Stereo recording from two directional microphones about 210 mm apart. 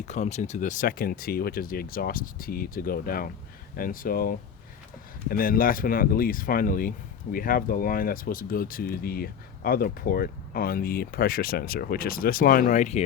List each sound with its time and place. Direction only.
0.0 s speech: 35° left (ahead or behind)